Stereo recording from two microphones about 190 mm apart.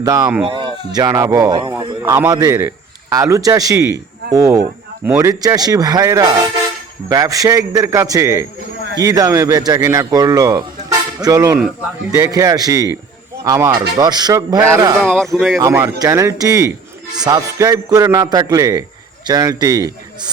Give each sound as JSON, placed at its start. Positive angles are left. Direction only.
{"t": 0.0, "sound": "a man's voice", "side_deg": -20}
{"t": 11.5, "sound": "speech", "side_deg": -5}
{"t": 12.1, "sound": "a man's voice", "side_deg": -15}
{"t": 15.0, "sound": "speech", "side_deg": 0}
{"t": 15.5, "sound": "a man's voice", "side_deg": -15}